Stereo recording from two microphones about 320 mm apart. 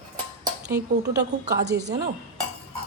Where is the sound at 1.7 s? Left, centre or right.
Right.